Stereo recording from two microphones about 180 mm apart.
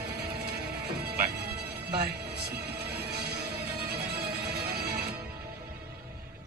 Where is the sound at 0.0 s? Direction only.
65° right (ahead or behind).